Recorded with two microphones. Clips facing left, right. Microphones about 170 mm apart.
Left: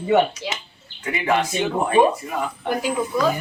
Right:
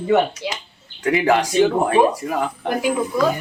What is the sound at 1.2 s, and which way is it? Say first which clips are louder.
Speech: right 2 dB; 85° right.